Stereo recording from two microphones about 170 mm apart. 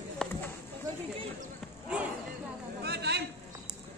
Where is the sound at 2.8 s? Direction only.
75° right (ahead or behind).